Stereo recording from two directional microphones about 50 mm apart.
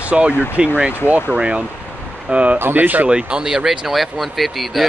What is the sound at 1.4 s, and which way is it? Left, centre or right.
Speech, right.